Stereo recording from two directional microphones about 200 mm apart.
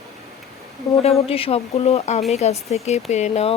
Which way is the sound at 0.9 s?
20° left (ahead or behind).